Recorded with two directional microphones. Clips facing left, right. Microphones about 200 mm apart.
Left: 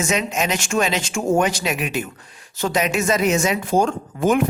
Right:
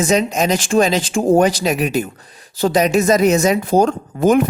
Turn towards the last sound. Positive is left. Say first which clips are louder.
# right 5 dB
turn(degrees=-40)  # may be behind; listen again after turning